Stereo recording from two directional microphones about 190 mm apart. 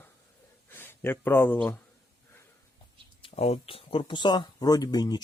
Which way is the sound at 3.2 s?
30° left (ahead or behind).